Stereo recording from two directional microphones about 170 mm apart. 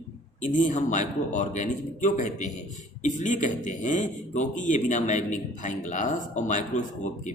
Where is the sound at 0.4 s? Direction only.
45° left (ahead or behind).